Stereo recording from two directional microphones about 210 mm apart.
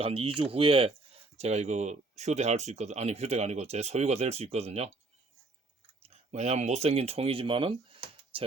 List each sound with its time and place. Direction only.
0.0 s speech: 25° right (ahead or behind)
6.0 s speech: 35° right (ahead or behind)